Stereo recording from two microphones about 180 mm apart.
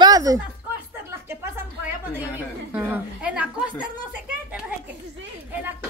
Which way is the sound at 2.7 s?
10° right (ahead or behind).